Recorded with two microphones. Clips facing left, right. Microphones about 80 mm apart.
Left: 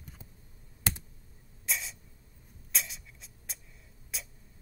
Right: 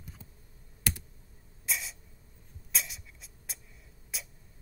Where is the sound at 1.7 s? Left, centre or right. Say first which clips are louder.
Even; centre.